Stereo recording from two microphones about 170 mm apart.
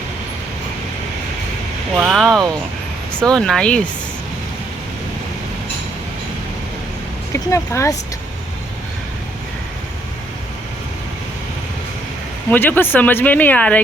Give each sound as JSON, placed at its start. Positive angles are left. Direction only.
{"t": 2.0, "sound": "speech", "side_deg": -5}
{"t": 7.3, "sound": "speech", "side_deg": 15}
{"t": 12.5, "sound": "speech", "side_deg": 10}